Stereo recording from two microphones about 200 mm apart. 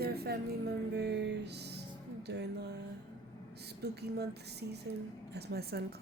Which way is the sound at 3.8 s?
55° right (ahead or behind).